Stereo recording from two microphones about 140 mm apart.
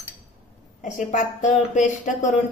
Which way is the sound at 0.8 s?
65° left (ahead or behind).